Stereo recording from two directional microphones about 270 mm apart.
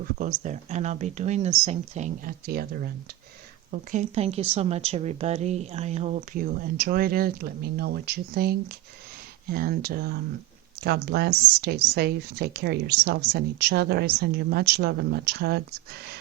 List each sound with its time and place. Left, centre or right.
0.0 s speech: right